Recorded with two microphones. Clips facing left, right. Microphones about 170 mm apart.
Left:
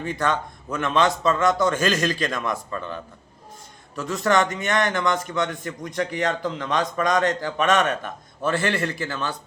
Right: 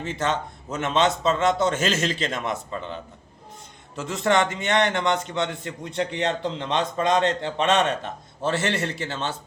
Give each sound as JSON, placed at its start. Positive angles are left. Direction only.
{"t": 0.0, "sound": "a man's voice", "side_deg": -20}